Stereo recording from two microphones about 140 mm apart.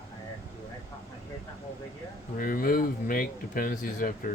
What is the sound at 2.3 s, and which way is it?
Speech, 90° left.